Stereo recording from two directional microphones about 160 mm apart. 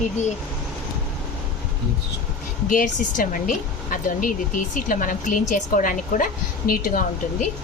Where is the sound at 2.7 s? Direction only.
55° left (ahead or behind).